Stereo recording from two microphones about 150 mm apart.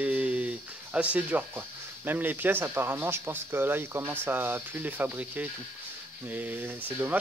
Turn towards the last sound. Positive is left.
turn(degrees=-10)  # may be behind; listen again after turning